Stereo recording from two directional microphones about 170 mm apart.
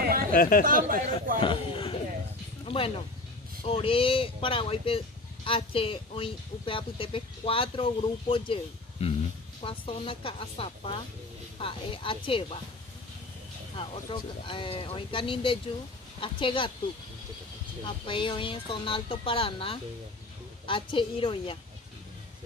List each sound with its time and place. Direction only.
0.0 s a sound: 60° right (ahead or behind)
0.3 s speech: 60° left (ahead or behind)
0.7 s speech: 55° right (ahead or behind)
1.4 s speech: 30° left (ahead or behind)
13.7 s speech: 30° left (ahead or behind)
18.0 s speech: 30° left (ahead or behind)